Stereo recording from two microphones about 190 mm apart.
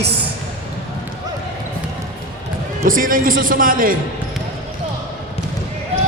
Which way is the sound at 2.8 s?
45° right (ahead or behind).